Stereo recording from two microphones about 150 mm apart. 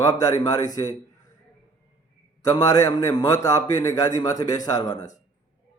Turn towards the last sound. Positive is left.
turn(degrees=25)  # may be behind; listen again after turning